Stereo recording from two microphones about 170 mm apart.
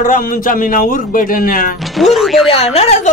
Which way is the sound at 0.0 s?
55° left (ahead or behind).